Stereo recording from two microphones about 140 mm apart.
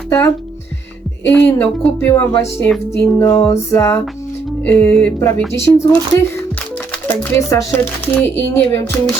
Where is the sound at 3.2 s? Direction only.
20° left (ahead or behind).